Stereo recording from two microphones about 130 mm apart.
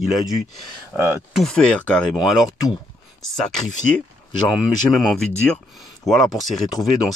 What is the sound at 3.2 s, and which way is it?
Speech, 5° left (ahead or behind).